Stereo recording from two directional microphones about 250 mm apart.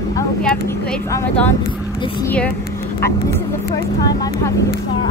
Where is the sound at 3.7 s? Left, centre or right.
Centre.